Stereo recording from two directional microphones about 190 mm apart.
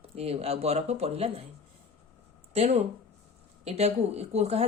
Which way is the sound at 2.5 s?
35° right (ahead or behind).